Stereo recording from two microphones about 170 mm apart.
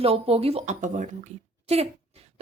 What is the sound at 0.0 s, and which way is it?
Speech, 35° right (ahead or behind).